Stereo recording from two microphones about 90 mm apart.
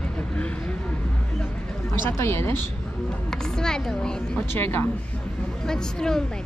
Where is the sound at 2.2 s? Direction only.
30° left (ahead or behind).